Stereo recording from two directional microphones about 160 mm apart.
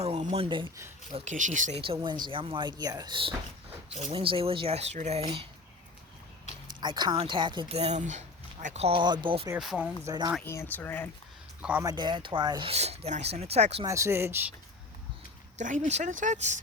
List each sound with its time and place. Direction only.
0.0 s a sound: 40° right (ahead or behind)
1.1 s speech: 50° right (ahead or behind)
2.0 s speech: 30° right (ahead or behind)
6.7 s speech: 30° right (ahead or behind)
9.6 s speech: 5° right (ahead or behind)
10.0 s speech: 25° right (ahead or behind)
10.4 s speech: 15° left (ahead or behind)
11.8 s speech: 25° right (ahead or behind)
13.8 s speech: 20° right (ahead or behind)
15.5 s speech: 50° right (ahead or behind)